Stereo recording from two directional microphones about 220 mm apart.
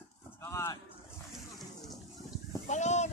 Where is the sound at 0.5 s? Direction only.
15° left (ahead or behind).